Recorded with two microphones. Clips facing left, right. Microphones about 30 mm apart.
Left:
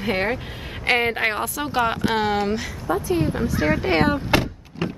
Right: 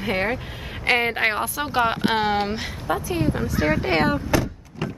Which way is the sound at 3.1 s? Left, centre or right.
Centre.